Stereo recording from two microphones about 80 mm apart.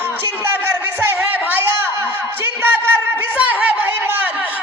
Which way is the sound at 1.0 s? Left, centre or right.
Right.